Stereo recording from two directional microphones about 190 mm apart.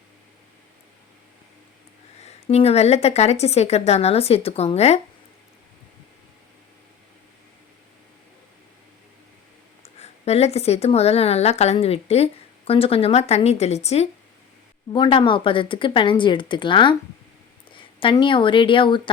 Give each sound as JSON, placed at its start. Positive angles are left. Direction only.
{"t": 2.2, "sound": "a woman's voice", "side_deg": 35}
{"t": 10.0, "sound": "a woman's voice", "side_deg": 35}
{"t": 14.9, "sound": "speech", "side_deg": 25}